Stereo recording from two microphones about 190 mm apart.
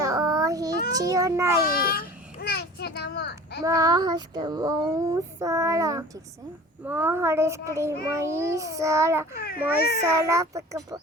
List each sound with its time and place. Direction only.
0.0 s child singing: 20° right (ahead or behind)
0.9 s a child's voice: 15° right (ahead or behind)
1.6 s a sound: 50° left (ahead or behind)
3.6 s a child's voice: 20° right (ahead or behind)
9.3 s speech: 50° left (ahead or behind)
10.0 s a child's voice: 15° right (ahead or behind)